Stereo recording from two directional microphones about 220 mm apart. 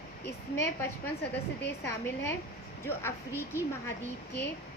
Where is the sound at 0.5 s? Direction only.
10° left (ahead or behind).